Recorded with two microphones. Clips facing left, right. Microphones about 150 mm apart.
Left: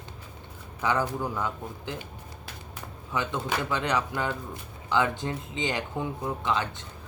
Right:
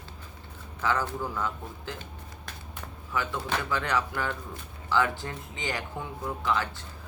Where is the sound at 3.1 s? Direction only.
20° left (ahead or behind).